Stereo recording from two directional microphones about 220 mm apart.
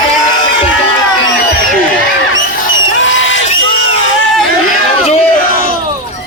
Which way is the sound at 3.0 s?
60° left (ahead or behind).